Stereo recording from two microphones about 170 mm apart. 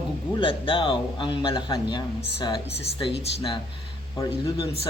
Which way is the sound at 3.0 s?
30° left (ahead or behind).